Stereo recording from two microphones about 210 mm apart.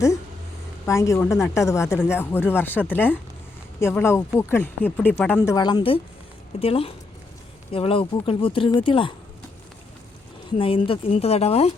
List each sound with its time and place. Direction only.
0.9 s speech: 15° left (ahead or behind)
5.4 s speech: 20° left (ahead or behind)
10.6 s speech: 25° left (ahead or behind)